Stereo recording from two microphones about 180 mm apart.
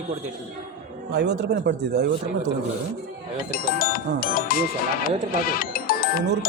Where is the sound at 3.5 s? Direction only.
55° left (ahead or behind).